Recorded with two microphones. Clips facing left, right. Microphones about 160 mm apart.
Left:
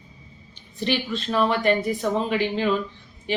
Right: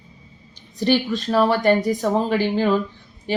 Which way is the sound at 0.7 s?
40° right (ahead or behind).